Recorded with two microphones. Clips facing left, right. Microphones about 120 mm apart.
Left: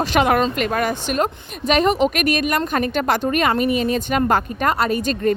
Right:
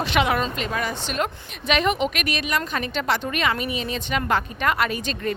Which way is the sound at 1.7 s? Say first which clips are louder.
Left 5 dB; 40° left (ahead or behind).